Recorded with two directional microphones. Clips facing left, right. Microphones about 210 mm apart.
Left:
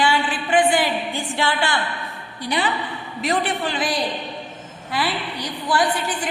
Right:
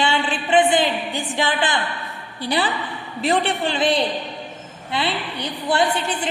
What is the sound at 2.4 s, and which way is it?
A woman's voice, 30° right (ahead or behind).